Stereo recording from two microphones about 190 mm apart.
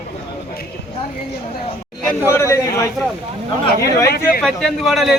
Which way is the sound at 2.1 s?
10° right (ahead or behind).